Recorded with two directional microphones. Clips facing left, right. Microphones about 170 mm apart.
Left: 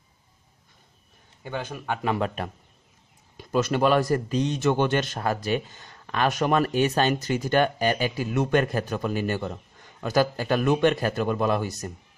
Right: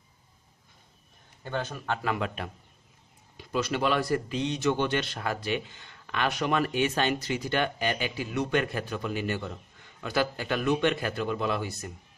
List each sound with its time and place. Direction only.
1.4 s speech: 10° left (ahead or behind)
2.1 s a man's voice: 40° left (ahead or behind)